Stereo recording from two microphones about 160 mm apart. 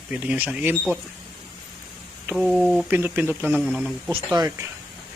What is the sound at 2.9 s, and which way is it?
Speech, 10° right (ahead or behind).